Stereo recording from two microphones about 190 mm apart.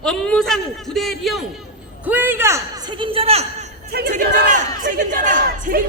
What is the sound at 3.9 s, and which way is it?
A man's voice, 55° right (ahead or behind).